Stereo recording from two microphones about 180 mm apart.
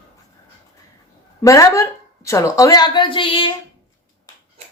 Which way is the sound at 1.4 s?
15° left (ahead or behind).